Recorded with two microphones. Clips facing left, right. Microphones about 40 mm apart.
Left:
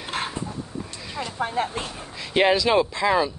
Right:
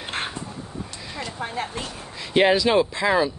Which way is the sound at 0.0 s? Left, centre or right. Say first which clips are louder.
Even; centre.